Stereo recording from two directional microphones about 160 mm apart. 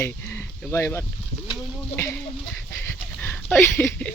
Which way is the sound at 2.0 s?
15° left (ahead or behind).